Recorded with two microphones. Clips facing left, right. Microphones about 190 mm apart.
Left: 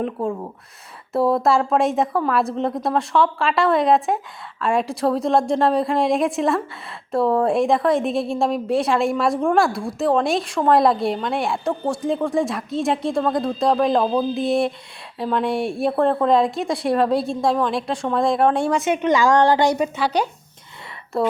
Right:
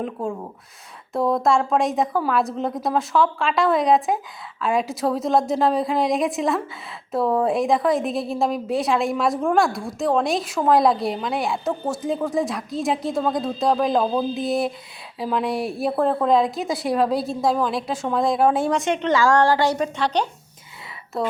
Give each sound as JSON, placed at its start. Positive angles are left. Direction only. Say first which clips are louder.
{"t": 0.0, "sound": "a woman's voice", "louder": "left 3 dB", "side_deg": 0}
{"t": 19.0, "sound": "a woman's voice", "louder": "left 2 dB", "side_deg": 15}